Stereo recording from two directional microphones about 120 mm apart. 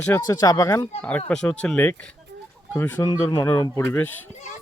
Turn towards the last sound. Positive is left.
turn(degrees=20)  # may be behind; listen again after turning